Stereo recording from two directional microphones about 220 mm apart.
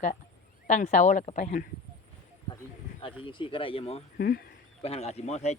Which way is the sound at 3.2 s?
25° left (ahead or behind).